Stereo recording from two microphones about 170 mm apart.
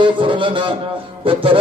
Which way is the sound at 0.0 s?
30° right (ahead or behind).